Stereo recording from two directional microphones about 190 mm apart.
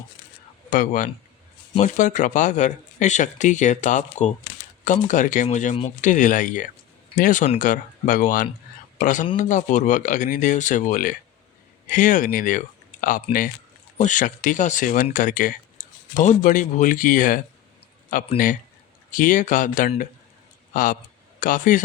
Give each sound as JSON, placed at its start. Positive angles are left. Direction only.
{"t": 0.7, "sound": "speech", "side_deg": 45}